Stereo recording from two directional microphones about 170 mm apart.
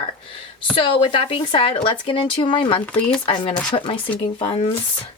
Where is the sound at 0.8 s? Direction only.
30° left (ahead or behind).